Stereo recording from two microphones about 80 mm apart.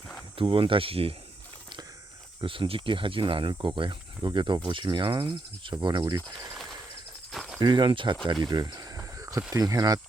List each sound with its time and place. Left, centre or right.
0.3 s speech: right
2.4 s speech: right
7.3 s cricket: centre
7.6 s speech: right
8.3 s speech: right
9.0 s a sound: right
9.5 s speech: right